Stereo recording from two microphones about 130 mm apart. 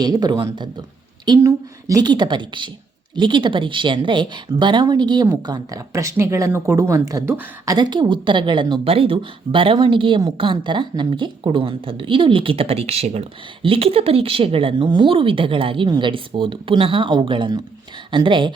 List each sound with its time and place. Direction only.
0.0 s speech: 30° right (ahead or behind)
1.4 s speech: 25° right (ahead or behind)